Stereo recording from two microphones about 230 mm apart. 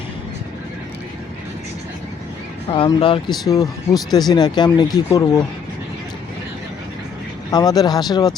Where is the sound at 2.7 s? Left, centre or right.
Left.